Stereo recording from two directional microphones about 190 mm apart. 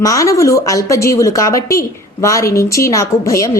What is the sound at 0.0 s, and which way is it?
A woman's voice, 15° left (ahead or behind).